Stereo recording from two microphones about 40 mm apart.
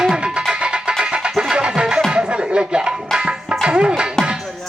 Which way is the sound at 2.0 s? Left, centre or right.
Right.